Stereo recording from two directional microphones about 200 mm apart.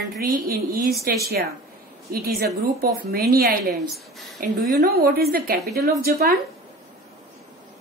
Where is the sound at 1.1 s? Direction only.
50° right (ahead or behind).